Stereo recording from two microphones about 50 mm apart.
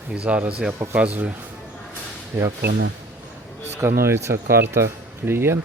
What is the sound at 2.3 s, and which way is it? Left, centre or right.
Speech, right.